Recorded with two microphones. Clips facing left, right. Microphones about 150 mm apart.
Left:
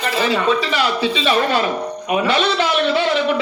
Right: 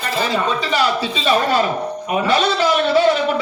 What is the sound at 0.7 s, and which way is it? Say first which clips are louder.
A man's voice: even; 35° right (ahead or behind).